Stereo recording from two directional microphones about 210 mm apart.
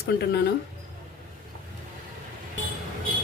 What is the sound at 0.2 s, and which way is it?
Speech, 50° left (ahead or behind).